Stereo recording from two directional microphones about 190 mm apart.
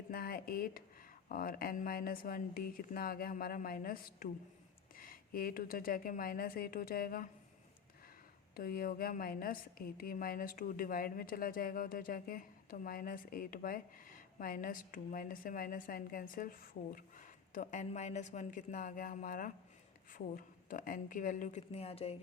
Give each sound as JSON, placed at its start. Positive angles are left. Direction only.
{"t": 0.1, "sound": "a woman's voice", "side_deg": 50}
{"t": 8.5, "sound": "a woman's voice", "side_deg": 50}